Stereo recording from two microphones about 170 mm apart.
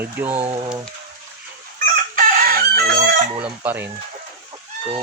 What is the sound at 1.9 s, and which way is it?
Chicken, 55° right (ahead or behind).